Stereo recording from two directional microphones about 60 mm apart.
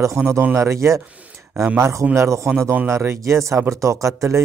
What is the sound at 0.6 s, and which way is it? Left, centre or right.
Speech, right.